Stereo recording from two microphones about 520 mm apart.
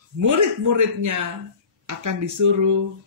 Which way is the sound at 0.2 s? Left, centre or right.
Right.